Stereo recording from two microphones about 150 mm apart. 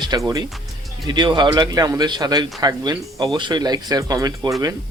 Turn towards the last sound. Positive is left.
turn(degrees=-25)  # may be behind; listen again after turning